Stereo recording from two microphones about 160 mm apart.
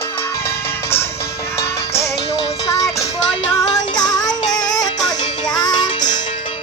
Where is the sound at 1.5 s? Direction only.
15° left (ahead or behind).